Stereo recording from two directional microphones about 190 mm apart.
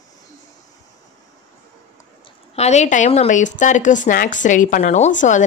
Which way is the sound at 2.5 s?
35° left (ahead or behind).